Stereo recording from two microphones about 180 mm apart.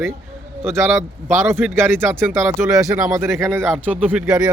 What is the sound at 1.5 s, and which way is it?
Speech, 10° right (ahead or behind).